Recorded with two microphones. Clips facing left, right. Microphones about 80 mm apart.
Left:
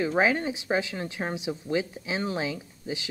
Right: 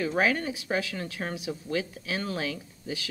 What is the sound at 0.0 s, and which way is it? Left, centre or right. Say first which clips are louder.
Speech: left 2 dB; left.